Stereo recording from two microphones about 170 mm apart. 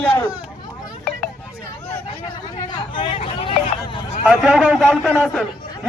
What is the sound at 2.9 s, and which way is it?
Hubbub, 30° left (ahead or behind).